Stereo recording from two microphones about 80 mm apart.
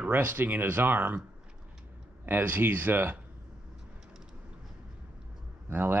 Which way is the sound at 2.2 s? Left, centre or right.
Right.